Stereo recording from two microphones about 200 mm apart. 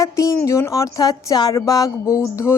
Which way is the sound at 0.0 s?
15° left (ahead or behind).